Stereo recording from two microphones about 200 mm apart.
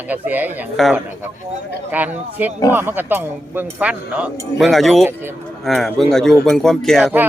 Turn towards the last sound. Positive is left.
turn(degrees=0)  # may be behind; listen again after turning